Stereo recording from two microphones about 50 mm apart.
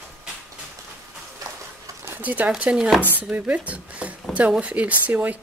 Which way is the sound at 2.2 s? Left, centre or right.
Right.